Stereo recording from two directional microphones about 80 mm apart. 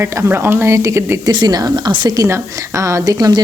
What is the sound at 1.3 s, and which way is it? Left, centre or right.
Speech, right.